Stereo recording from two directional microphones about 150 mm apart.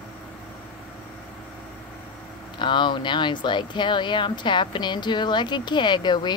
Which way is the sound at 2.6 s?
30° left (ahead or behind).